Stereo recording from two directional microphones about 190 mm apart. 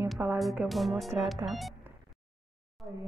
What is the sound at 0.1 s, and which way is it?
Speech, 5° right (ahead or behind).